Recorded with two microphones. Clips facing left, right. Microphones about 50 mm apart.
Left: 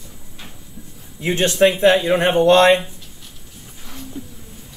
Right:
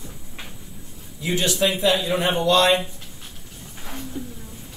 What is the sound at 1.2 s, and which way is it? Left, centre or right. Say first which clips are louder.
Speech: left 6 dB; left.